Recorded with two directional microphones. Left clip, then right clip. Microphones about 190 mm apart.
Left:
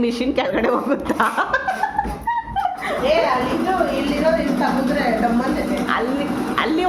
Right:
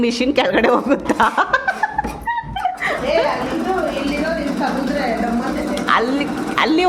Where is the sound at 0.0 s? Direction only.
20° right (ahead or behind).